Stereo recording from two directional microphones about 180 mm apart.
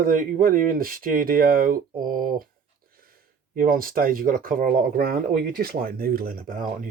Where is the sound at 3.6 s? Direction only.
50° right (ahead or behind).